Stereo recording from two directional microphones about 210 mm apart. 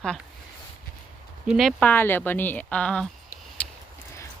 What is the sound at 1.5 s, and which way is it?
Speech, centre (ahead or behind).